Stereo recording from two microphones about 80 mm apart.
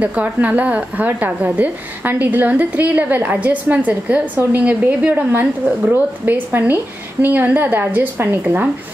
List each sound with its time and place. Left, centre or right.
0.0 s a woman's voice: centre